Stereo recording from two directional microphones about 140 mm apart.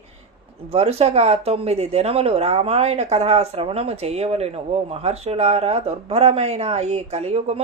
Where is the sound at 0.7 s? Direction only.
45° right (ahead or behind).